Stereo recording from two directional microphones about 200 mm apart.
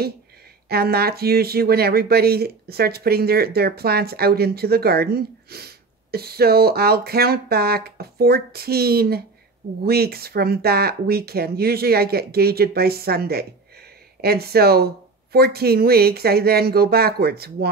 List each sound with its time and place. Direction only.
0.7 s speech: 50° right (ahead or behind)